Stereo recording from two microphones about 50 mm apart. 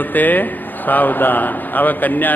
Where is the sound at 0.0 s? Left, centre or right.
Left.